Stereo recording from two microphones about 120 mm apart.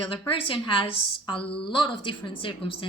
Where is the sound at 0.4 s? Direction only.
45° left (ahead or behind).